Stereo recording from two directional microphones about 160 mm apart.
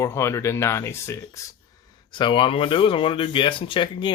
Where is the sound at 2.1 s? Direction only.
30° left (ahead or behind).